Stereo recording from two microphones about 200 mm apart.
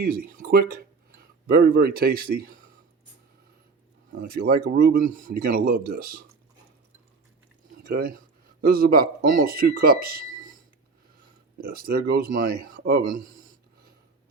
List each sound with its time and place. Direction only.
0.0 s speech: 50° right (ahead or behind)
4.2 s speech: 50° right (ahead or behind)
7.9 s speech: 45° right (ahead or behind)
11.5 s speech: 50° right (ahead or behind)